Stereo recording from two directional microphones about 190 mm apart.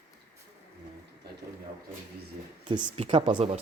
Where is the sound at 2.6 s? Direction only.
25° right (ahead or behind).